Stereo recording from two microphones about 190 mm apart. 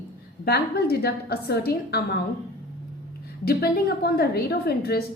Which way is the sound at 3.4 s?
55° left (ahead or behind).